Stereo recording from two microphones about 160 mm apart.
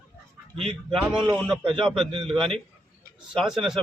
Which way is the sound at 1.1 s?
5° right (ahead or behind).